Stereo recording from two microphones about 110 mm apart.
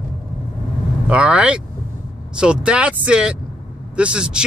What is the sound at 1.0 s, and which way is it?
Speech, 10° right (ahead or behind).